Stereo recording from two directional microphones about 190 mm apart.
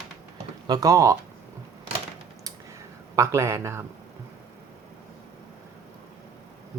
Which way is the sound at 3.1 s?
15° right (ahead or behind).